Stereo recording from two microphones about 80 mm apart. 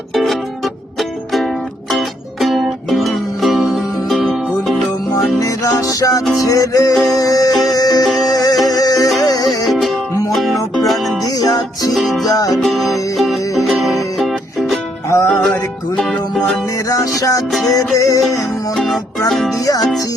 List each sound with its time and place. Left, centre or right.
0.1 s music: centre
1.9 s music: centre
5.4 s music: left
10.3 s music: centre
11.3 s music: left
11.9 s music: centre
12.2 s music: left
12.6 s music: centre
15.3 s music: centre
16.0 s music: centre
16.9 s music: left
19.6 s music: left